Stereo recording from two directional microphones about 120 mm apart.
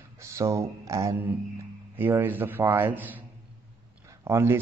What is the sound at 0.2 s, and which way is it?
A man's voice, 25° right (ahead or behind).